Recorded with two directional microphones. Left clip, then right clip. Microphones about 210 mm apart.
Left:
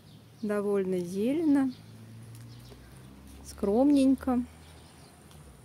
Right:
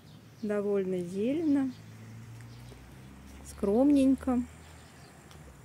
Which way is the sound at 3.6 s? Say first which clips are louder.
Left 1 dB; 10° left (ahead or behind).